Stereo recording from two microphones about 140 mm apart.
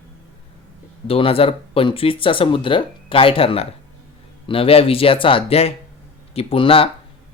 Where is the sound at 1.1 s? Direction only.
40° left (ahead or behind).